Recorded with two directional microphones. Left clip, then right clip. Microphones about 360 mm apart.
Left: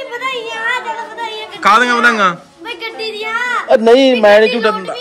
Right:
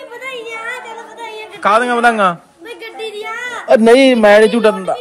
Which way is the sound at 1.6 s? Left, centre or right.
Centre.